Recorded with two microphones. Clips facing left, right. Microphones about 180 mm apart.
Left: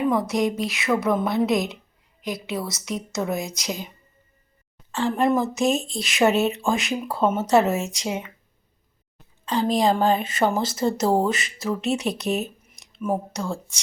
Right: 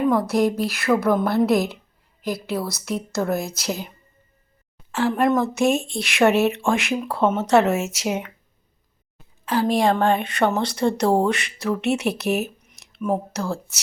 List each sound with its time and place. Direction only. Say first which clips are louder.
0.0 s speech: right 3 dB; centre (ahead or behind)
4.9 s a woman's voice: right 2 dB; 10° right (ahead or behind)
9.1 s speech: right 2 dB; 5° right (ahead or behind)